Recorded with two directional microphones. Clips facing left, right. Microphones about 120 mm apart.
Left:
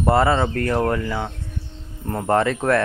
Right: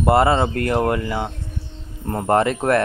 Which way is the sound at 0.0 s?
15° right (ahead or behind).